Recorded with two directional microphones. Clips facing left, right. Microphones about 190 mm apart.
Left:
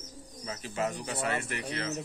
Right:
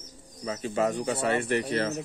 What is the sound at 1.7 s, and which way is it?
Speech, 45° right (ahead or behind).